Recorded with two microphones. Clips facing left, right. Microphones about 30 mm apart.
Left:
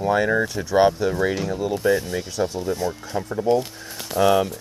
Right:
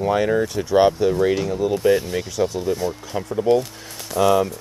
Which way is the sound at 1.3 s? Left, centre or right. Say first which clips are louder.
Right 3 dB; centre.